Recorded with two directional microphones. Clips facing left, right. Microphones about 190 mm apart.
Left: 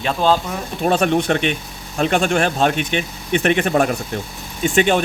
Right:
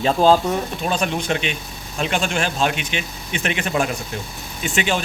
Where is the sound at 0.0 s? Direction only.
35° right (ahead or behind).